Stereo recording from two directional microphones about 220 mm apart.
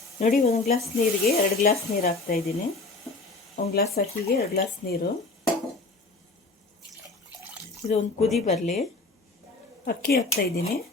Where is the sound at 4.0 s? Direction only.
45° left (ahead or behind).